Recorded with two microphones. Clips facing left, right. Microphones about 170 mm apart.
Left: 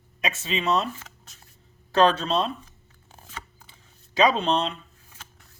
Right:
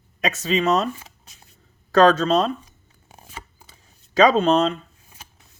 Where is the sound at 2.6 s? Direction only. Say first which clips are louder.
Right 1 dB; 15° right (ahead or behind).